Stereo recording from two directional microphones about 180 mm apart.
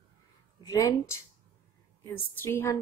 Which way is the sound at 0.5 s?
20° left (ahead or behind).